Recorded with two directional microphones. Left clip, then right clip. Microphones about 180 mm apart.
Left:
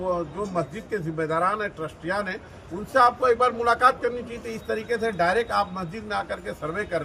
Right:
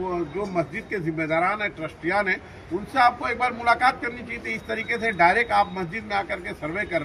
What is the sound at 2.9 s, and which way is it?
Speech, 20° left (ahead or behind).